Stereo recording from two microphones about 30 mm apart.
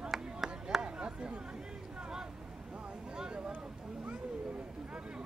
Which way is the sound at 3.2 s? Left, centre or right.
Right.